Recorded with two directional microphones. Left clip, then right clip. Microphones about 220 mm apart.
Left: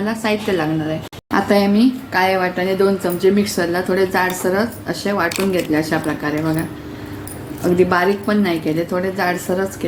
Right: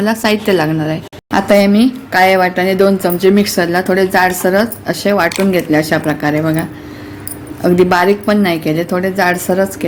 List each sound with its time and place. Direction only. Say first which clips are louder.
0.0 s a woman's voice: right 6 dB; 45° right (ahead or behind)
7.8 s a woman's voice: right 5 dB; 40° right (ahead or behind)